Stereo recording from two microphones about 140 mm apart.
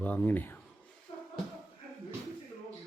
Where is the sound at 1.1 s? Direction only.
40° left (ahead or behind).